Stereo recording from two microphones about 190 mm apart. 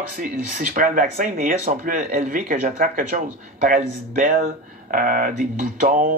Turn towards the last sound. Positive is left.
turn(degrees=-45)  # may be behind; listen again after turning